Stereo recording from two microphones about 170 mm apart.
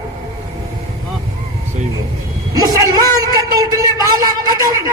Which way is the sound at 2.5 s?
20° right (ahead or behind).